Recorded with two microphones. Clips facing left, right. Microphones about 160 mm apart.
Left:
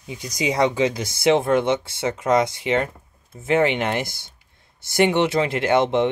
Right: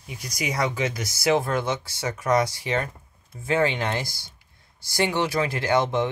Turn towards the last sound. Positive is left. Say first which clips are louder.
# left 4 dB
turn(degrees=25)  # may be behind; listen again after turning